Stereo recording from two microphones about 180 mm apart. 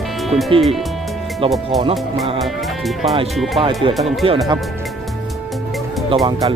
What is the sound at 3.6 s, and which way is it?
Speech, 30° right (ahead or behind).